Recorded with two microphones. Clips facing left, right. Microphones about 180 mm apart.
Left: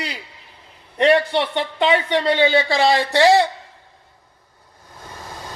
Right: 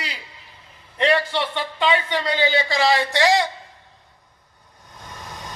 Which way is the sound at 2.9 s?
30° left (ahead or behind).